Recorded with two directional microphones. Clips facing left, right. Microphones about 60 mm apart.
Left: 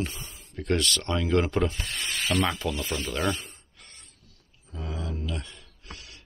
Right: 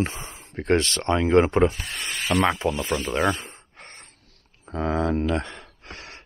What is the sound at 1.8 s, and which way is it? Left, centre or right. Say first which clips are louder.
Rub: right 2 dB; centre.